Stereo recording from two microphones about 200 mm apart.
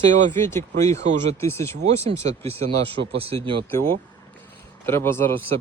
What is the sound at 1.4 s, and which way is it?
Speech, 15° left (ahead or behind).